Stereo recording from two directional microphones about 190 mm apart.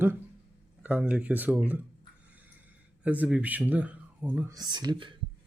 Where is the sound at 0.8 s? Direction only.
5° right (ahead or behind).